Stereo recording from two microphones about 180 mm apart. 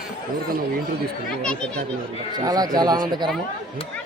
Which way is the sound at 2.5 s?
20° right (ahead or behind).